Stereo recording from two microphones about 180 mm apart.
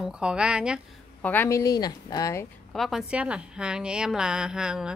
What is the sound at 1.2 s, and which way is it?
A woman's voice, 10° left (ahead or behind).